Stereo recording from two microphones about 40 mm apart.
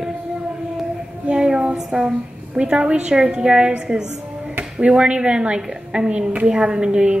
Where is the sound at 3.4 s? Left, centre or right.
Right.